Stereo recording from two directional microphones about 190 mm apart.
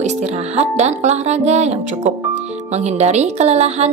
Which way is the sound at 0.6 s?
35° right (ahead or behind).